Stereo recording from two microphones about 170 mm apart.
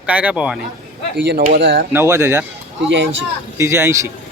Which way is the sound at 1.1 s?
90° right.